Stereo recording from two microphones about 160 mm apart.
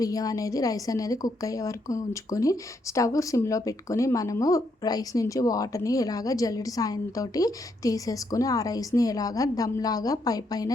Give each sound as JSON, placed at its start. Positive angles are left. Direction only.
{"t": 0.0, "sound": "a woman's voice", "side_deg": 20}